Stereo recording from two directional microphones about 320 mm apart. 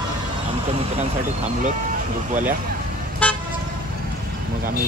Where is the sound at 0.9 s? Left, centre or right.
Right.